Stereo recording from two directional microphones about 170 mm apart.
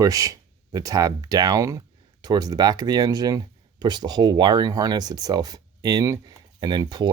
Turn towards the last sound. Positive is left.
turn(degrees=-25)  # may be behind; listen again after turning